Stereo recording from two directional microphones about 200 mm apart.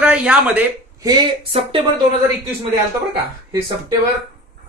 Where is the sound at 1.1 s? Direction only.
30° right (ahead or behind).